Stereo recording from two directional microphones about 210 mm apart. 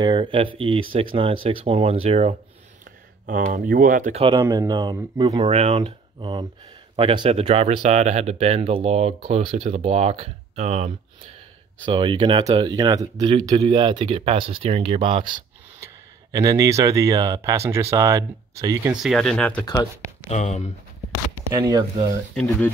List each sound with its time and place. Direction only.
0.0 s speech: 25° right (ahead or behind)
3.3 s speech: 40° right (ahead or behind)
4.2 s speech: 20° right (ahead or behind)
5.4 s speech: 30° right (ahead or behind)
19.0 s speech: centre (ahead or behind)
19.6 s speech: 20° left (ahead or behind)
20.2 s speech: 35° left (ahead or behind)
21.5 s speech: 20° right (ahead or behind)
22.3 s speech: 5° left (ahead or behind)